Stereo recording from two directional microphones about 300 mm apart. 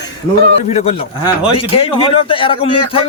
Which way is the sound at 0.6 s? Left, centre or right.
Centre.